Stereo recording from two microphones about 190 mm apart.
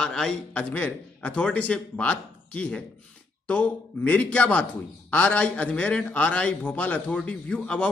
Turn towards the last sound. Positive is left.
turn(degrees=5)  # may be behind; listen again after turning